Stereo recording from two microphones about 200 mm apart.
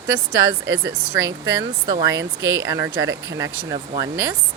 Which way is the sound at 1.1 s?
15° right (ahead or behind).